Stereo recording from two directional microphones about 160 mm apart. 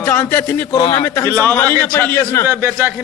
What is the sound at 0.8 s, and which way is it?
Speech, 30° left (ahead or behind).